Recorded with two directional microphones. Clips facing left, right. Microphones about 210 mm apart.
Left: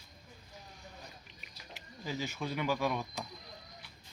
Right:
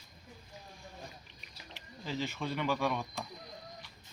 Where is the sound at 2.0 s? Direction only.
10° left (ahead or behind).